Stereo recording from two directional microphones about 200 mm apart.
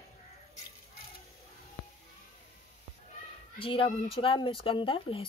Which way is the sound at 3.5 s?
25° left (ahead or behind).